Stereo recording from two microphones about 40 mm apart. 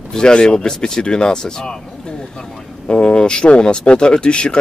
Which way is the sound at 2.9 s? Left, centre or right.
Centre.